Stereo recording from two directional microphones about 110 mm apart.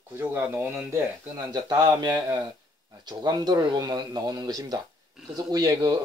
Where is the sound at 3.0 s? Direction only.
40° right (ahead or behind).